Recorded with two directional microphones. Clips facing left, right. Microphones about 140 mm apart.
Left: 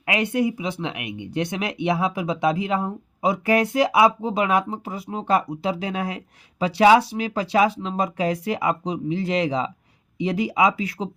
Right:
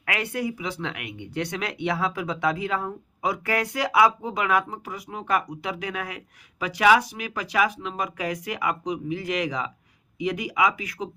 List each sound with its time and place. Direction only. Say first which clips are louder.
0.0 s speech: left 6 dB; 20° left (ahead or behind)